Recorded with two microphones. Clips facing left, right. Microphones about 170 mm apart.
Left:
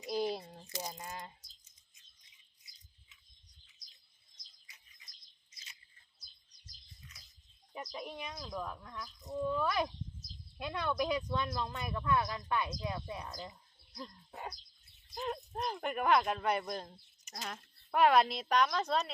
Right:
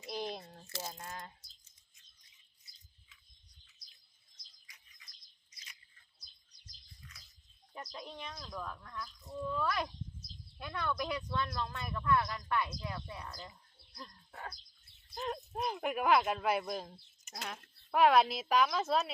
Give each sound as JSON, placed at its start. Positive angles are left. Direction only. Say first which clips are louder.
{"t": 0.1, "sound": "a sound", "louder": "left 5 dB", "side_deg": 5}
{"t": 0.9, "sound": "speech", "louder": "left 1 dB", "side_deg": 15}
{"t": 4.6, "sound": "bird", "louder": "even", "side_deg": 25}
{"t": 7.1, "sound": "a sound", "louder": "right 1 dB", "side_deg": 20}
{"t": 7.9, "sound": "speech", "louder": "left 3 dB", "side_deg": 10}
{"t": 8.4, "sound": "speech", "louder": "left 3 dB", "side_deg": 15}
{"t": 13.9, "sound": "bird", "louder": "left 4 dB", "side_deg": 20}
{"t": 15.1, "sound": "speech", "louder": "even", "side_deg": 0}